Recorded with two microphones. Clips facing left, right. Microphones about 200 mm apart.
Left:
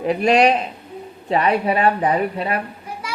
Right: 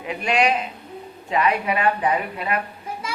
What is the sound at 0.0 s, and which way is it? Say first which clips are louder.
Speech: left 6 dB; 40° left (ahead or behind).